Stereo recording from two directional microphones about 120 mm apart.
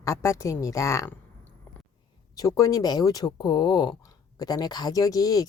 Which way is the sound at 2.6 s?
30° left (ahead or behind).